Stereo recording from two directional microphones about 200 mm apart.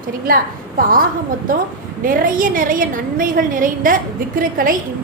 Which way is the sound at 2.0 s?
40° right (ahead or behind).